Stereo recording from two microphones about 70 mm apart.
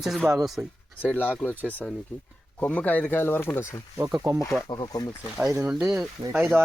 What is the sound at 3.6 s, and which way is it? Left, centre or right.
Speech, left.